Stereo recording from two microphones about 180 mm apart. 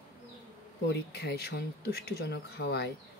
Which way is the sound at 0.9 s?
65° left (ahead or behind).